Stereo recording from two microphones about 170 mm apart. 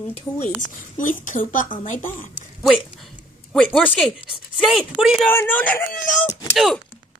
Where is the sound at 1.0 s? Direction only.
50° left (ahead or behind).